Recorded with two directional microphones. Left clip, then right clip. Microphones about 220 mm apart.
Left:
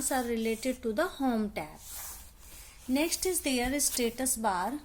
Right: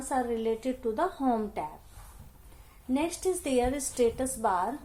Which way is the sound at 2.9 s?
30° left (ahead or behind).